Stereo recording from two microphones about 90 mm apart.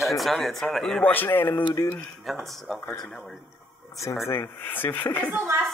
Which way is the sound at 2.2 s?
Centre (ahead or behind).